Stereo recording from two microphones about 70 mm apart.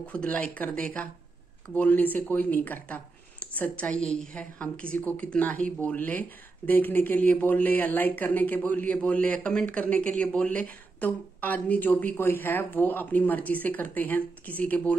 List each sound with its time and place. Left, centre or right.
0.0 s speech: centre
4.0 s speech: centre